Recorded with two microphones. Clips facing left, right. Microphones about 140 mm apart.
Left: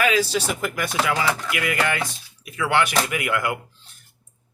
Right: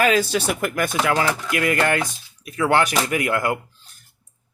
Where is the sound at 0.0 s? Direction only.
50° right (ahead or behind).